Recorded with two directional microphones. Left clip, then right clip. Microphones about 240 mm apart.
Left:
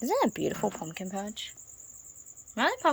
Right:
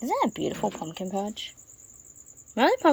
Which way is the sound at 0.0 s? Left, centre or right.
Left.